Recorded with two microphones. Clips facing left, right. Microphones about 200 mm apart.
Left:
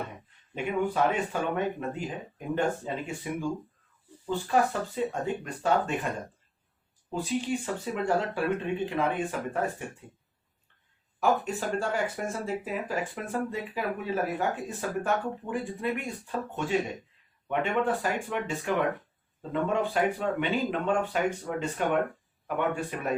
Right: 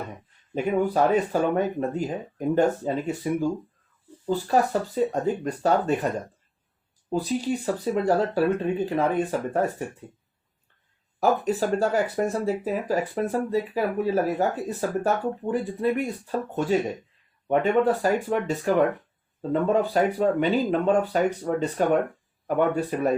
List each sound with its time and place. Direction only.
0.5 s speech: 40° right (ahead or behind)
7.1 s speech: 40° right (ahead or behind)
11.2 s speech: 35° right (ahead or behind)